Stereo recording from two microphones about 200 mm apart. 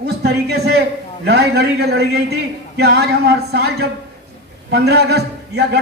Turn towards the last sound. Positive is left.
turn(degrees=-55)  # may be behind; listen again after turning